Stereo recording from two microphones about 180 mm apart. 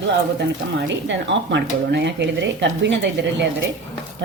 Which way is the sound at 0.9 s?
80° right.